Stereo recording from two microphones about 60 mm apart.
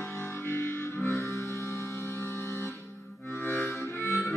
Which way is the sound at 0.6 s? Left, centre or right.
Left.